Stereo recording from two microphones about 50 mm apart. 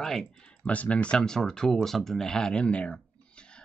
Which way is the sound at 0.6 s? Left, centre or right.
Left.